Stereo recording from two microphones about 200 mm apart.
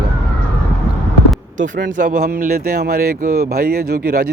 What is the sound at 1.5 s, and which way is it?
Speech, 40° right (ahead or behind).